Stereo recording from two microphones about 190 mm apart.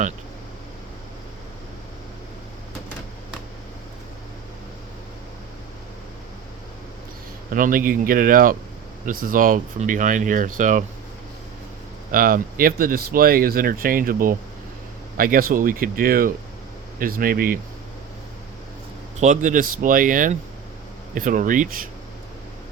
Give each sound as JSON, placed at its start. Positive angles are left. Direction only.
{"t": 7.5, "sound": "speech", "side_deg": -45}
{"t": 12.1, "sound": "speech", "side_deg": -50}
{"t": 19.2, "sound": "speech", "side_deg": -40}